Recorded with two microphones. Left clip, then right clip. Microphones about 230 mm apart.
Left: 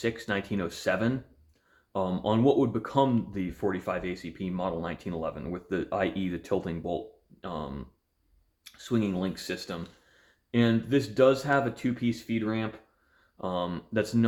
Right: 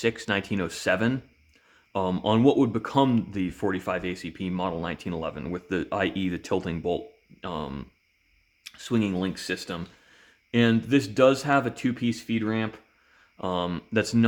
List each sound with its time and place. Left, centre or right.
0.0 s speech: right